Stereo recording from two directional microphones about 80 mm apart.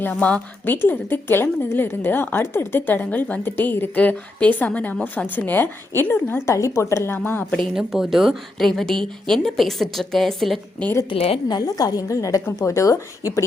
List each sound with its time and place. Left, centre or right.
0.0 s a woman's voice: centre
7.5 s a woman's voice: centre
11.1 s a woman's voice: left